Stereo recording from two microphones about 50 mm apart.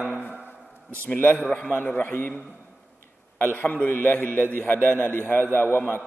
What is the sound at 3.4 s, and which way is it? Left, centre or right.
A man's voice, left.